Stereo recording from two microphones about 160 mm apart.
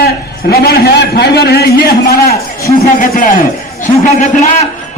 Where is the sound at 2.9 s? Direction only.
60° left (ahead or behind).